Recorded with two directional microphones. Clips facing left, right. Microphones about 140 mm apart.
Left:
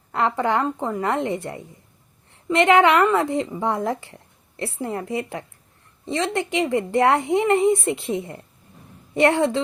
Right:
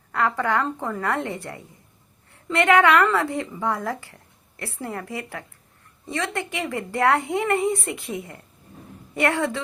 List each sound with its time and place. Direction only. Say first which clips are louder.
0.1 s a woman's voice: left 2 dB; 20° left (ahead or behind)